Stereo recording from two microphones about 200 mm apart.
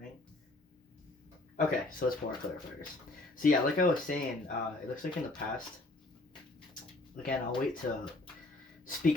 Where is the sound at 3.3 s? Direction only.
45° left (ahead or behind).